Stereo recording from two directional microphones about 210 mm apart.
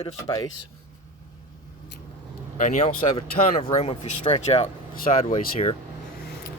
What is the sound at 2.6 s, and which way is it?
Speech, 35° left (ahead or behind).